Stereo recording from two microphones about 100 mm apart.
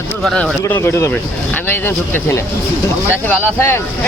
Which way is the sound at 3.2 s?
20° left (ahead or behind).